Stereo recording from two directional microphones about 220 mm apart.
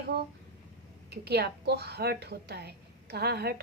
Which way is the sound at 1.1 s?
45° right (ahead or behind).